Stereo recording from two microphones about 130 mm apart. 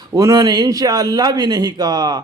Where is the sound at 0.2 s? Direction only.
25° right (ahead or behind).